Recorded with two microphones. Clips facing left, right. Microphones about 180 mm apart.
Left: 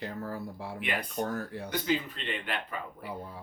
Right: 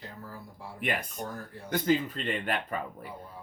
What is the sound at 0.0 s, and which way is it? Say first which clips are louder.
Speech: left 8 dB; 70° left (ahead or behind).